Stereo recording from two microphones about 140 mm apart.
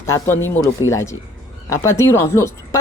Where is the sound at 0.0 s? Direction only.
15° left (ahead or behind).